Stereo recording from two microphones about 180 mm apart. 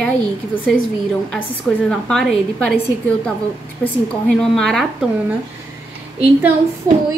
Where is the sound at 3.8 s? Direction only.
5° left (ahead or behind).